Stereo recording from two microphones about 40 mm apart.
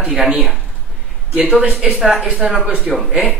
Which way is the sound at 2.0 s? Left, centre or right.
Centre.